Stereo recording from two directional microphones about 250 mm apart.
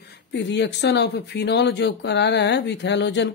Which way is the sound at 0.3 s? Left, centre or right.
Left.